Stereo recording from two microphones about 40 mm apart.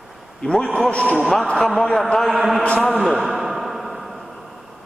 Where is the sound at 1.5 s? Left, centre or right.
Centre.